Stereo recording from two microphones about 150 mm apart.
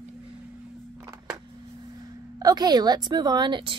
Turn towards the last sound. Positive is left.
turn(degrees=-30)  # may be behind; listen again after turning